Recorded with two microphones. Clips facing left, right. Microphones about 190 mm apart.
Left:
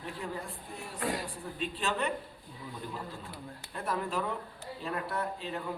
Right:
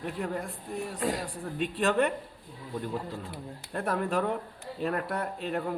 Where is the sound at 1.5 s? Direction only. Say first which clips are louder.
Right 8 dB; 60° right (ahead or behind).